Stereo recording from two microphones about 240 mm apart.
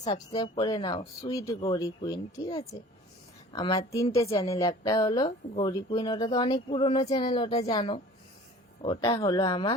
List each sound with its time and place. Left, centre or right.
0.0 s a woman's voice: centre